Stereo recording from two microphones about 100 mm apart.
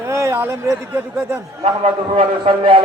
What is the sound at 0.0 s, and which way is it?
Speech, 30° right (ahead or behind).